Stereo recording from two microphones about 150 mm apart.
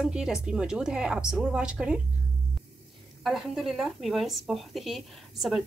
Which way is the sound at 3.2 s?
Centre (ahead or behind).